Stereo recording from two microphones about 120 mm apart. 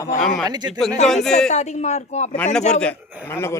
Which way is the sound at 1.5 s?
70° left (ahead or behind).